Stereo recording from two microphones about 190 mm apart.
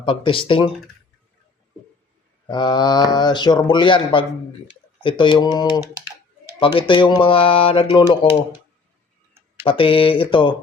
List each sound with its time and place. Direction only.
0.0 s speech: 25° left (ahead or behind)
2.5 s speech: 20° left (ahead or behind)
9.6 s speech: 30° left (ahead or behind)